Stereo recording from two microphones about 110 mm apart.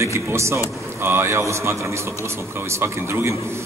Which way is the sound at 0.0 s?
25° right (ahead or behind).